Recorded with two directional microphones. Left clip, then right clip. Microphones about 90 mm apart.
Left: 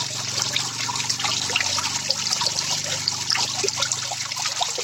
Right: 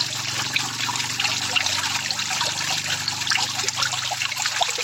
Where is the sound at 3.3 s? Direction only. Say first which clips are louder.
Right 1 dB; 30° right (ahead or behind).